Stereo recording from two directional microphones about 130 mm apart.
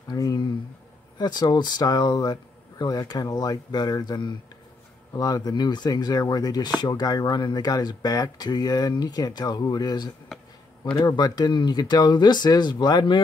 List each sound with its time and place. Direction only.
0.1 s speech: 30° left (ahead or behind)